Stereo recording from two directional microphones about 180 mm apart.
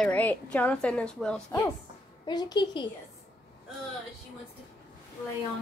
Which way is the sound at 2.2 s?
25° left (ahead or behind).